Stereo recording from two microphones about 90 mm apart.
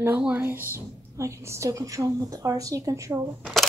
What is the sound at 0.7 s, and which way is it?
A woman's voice, 30° right (ahead or behind).